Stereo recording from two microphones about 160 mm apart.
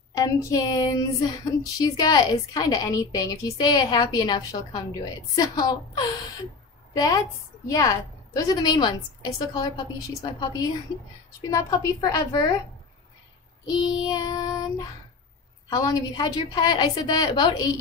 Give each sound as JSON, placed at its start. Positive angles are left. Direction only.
{"t": 0.1, "sound": "speech", "side_deg": 20}
{"t": 13.7, "sound": "speech", "side_deg": 25}